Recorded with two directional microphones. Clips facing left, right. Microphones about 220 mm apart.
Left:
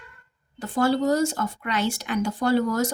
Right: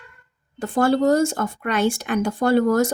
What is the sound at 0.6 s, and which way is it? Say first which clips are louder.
Speech: right 4 dB; 50° right (ahead or behind).